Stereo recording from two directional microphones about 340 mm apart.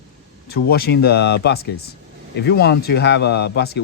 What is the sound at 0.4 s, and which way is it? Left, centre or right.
Speech, left.